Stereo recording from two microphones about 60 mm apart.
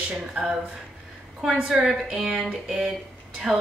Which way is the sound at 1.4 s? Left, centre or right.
Centre.